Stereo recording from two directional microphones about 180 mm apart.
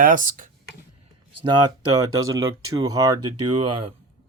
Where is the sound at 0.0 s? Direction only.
50° right (ahead or behind).